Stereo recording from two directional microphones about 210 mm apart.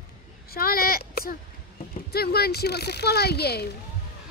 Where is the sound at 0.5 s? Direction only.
45° left (ahead or behind).